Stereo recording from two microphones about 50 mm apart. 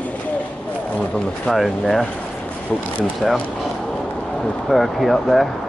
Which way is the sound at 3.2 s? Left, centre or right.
Centre.